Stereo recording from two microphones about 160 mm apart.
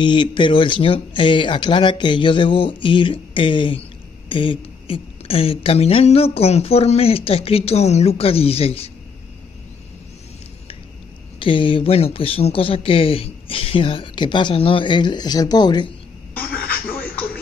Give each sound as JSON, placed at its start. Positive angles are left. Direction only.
{"t": 0.0, "sound": "a woman's voice", "side_deg": 30}
{"t": 11.3, "sound": "a woman's voice", "side_deg": 35}